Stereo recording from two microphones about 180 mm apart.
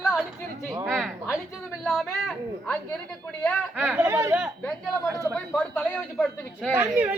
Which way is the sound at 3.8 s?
10° right (ahead or behind).